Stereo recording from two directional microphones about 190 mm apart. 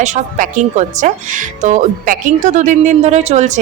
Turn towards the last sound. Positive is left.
turn(degrees=-35)  # may be behind; listen again after turning